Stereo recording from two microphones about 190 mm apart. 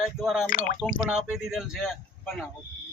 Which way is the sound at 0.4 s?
45° left (ahead or behind).